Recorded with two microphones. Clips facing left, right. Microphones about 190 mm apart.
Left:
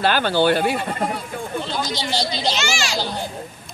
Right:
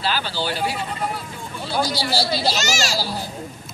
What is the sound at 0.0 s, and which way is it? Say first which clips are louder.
Speech: left 7 dB; 55° left (ahead or behind).